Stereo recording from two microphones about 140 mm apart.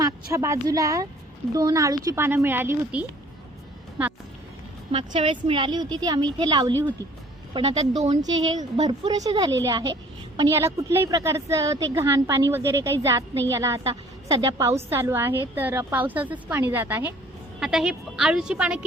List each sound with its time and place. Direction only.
0.0 s a woman's voice: 20° right (ahead or behind)
4.9 s a woman's voice: 40° right (ahead or behind)
7.5 s speech: 45° right (ahead or behind)
8.2 s a woman's voice: 30° right (ahead or behind)
10.5 s a woman's voice: 20° right (ahead or behind)